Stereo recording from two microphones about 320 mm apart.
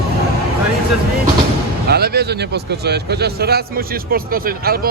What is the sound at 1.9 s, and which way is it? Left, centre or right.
A man's voice, right.